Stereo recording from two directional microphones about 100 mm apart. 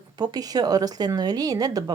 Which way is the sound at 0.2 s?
40° right (ahead or behind).